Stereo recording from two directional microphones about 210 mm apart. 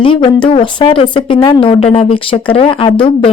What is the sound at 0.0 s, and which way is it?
Speech, 25° left (ahead or behind).